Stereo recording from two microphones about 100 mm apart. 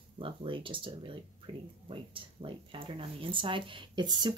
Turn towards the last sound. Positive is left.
turn(degrees=-45)  # may be behind; listen again after turning